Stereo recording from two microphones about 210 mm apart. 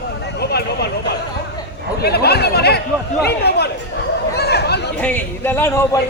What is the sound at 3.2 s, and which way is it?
Chatter, 50° left (ahead or behind).